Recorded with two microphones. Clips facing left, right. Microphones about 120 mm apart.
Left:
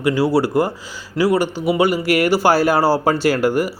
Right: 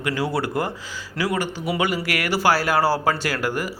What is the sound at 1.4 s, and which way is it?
Speech, 15° left (ahead or behind).